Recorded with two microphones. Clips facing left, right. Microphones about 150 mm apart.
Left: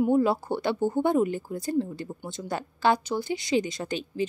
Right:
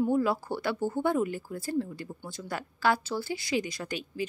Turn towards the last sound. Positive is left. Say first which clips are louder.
# left 5 dB
turn(degrees=25)  # may be behind; listen again after turning